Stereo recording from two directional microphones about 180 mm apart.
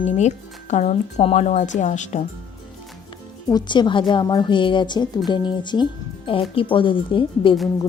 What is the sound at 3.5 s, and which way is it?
Speech, 25° left (ahead or behind).